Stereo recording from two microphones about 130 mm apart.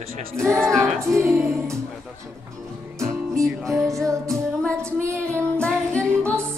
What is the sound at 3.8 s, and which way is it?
Music, 25° right (ahead or behind).